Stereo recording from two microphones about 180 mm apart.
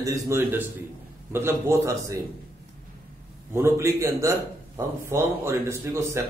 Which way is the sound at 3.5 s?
15° right (ahead or behind).